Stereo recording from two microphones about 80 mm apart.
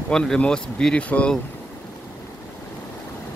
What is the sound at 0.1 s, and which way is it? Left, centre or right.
Speech, centre.